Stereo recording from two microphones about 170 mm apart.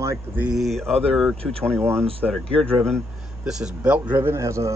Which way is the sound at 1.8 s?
15° right (ahead or behind).